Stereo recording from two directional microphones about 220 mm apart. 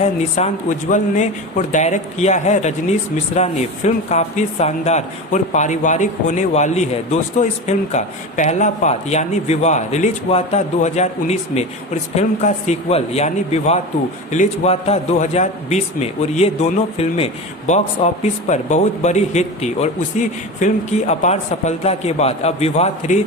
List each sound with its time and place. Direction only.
0.0 s speech: 30° left (ahead or behind)